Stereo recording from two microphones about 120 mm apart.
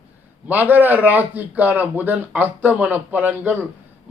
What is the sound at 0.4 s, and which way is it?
Speech, 15° right (ahead or behind).